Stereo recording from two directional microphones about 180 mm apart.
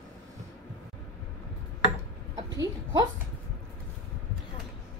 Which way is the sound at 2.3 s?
20° right (ahead or behind).